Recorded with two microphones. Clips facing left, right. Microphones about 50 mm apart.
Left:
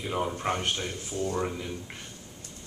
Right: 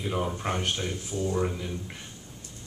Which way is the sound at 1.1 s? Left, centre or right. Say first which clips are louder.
Right 1 dB; centre.